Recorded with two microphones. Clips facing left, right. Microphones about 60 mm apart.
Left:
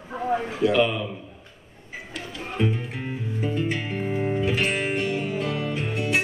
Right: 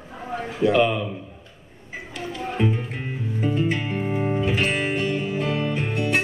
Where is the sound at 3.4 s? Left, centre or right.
Centre.